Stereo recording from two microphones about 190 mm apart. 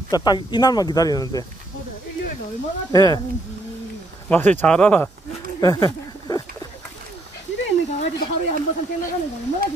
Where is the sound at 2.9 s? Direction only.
20° left (ahead or behind).